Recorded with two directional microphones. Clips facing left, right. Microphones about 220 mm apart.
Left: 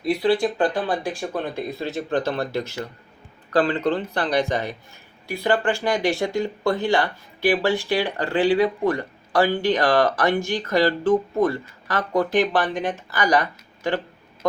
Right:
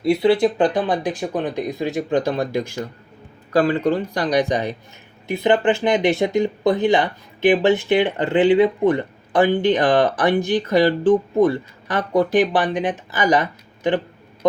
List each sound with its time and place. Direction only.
0.0 s speech: 25° right (ahead or behind)